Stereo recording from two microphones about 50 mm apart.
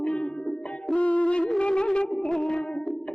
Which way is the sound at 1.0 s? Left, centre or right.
Left.